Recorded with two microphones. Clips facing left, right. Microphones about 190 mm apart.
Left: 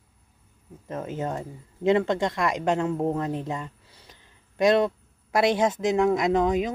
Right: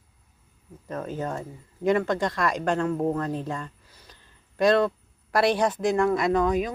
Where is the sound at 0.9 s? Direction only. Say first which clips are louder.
Even; 20° left (ahead or behind).